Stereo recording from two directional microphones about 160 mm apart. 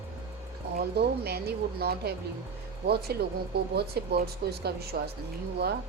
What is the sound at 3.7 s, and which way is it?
Speech, 85° right.